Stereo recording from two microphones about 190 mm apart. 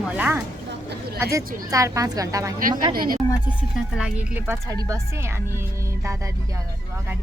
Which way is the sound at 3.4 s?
5° right (ahead or behind).